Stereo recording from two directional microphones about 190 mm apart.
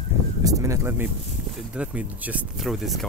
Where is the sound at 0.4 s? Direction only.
15° right (ahead or behind).